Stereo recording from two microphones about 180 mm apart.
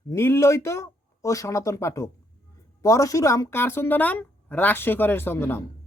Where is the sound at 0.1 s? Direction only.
15° left (ahead or behind).